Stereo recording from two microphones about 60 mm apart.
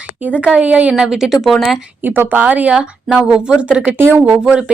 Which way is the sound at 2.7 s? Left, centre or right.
Centre.